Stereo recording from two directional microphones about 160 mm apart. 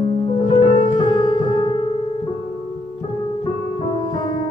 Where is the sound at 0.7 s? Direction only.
30° left (ahead or behind).